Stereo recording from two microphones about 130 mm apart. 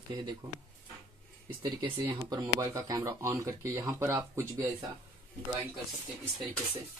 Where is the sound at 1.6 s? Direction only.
35° right (ahead or behind).